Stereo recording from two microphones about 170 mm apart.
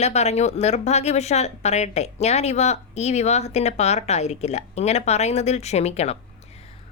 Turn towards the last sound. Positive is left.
turn(degrees=40)  # may be behind; listen again after turning